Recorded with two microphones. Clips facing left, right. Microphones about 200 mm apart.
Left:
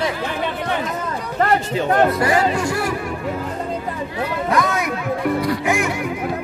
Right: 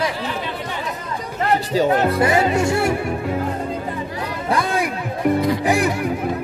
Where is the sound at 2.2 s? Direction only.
25° right (ahead or behind).